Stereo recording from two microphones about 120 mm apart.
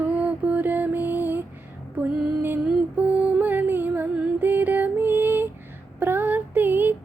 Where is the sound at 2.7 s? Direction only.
10° right (ahead or behind).